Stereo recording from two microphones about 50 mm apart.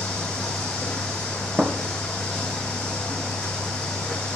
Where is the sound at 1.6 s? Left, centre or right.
Centre.